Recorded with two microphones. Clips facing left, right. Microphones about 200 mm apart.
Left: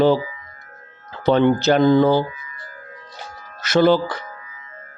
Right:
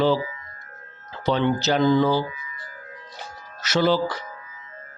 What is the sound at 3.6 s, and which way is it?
Speech, 55° left (ahead or behind).